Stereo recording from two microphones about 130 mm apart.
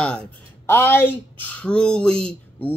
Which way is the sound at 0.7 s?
20° left (ahead or behind).